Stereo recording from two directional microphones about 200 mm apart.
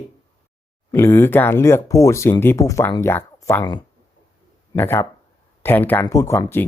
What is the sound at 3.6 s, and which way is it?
Speech, 20° left (ahead or behind).